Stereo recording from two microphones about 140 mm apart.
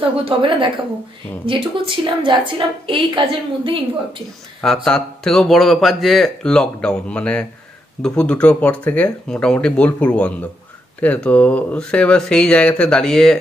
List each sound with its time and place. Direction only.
0.2 s a woman's voice: 35° right (ahead or behind)
4.8 s speech: 5° left (ahead or behind)